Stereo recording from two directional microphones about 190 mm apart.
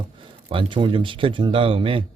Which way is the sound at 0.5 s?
25° right (ahead or behind).